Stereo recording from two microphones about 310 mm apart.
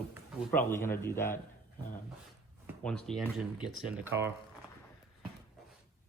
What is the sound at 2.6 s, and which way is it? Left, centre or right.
Speech, centre.